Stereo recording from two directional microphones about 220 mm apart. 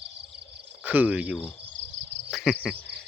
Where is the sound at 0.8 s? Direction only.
5° right (ahead or behind).